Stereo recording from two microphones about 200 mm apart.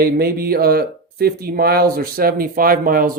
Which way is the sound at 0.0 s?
50° right (ahead or behind).